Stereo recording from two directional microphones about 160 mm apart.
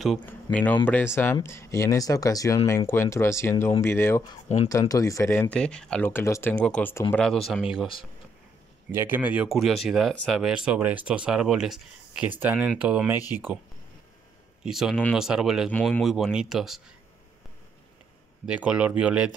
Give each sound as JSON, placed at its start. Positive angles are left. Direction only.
{"t": 0.0, "sound": "speech", "side_deg": 5}
{"t": 7.2, "sound": "speech", "side_deg": 0}
{"t": 8.9, "sound": "speech", "side_deg": -15}
{"t": 14.6, "sound": "speech", "side_deg": 0}
{"t": 18.4, "sound": "speech", "side_deg": -5}